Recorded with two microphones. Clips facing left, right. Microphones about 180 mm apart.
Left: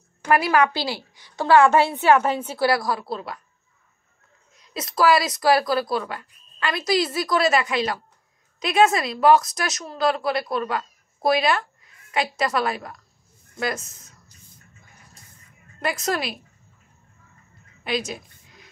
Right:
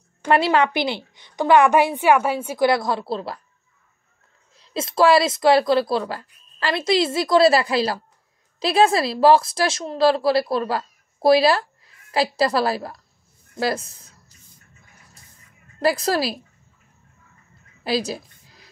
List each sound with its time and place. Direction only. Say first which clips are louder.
0.2 s a woman's voice: right 1 dB; 25° right (ahead or behind)
4.6 s a woman's voice: right 4 dB; 30° right (ahead or behind)
15.8 s speech: right 5 dB; 35° right (ahead or behind)
17.8 s a sound: right 4 dB; 35° right (ahead or behind)